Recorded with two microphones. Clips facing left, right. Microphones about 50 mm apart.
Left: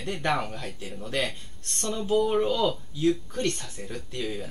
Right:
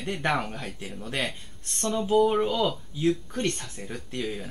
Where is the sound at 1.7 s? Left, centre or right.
Centre.